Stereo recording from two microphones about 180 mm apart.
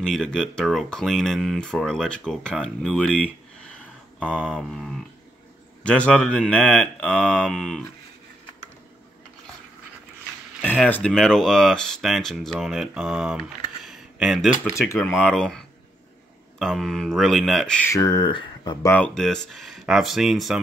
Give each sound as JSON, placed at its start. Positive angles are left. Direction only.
{"t": 0.0, "sound": "speech", "side_deg": 0}
{"t": 10.6, "sound": "speech", "side_deg": 10}
{"t": 17.9, "sound": "speech", "side_deg": 20}
{"t": 18.9, "sound": "speech", "side_deg": 5}